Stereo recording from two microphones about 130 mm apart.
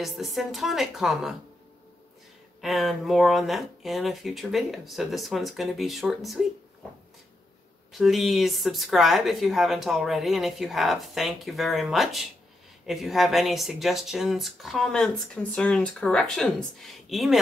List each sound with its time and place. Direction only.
0.0 s speech: centre (ahead or behind)
2.6 s speech: centre (ahead or behind)
8.0 s speech: centre (ahead or behind)